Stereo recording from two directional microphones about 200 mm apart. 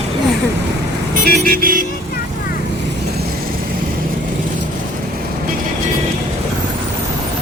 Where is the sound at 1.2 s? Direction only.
50° right (ahead or behind).